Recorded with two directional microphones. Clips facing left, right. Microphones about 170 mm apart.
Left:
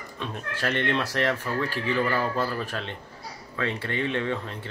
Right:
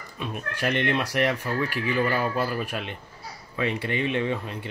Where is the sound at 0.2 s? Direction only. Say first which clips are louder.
Right 2 dB; 15° right (ahead or behind).